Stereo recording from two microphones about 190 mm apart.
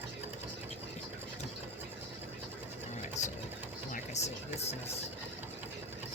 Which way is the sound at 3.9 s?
35° left (ahead or behind).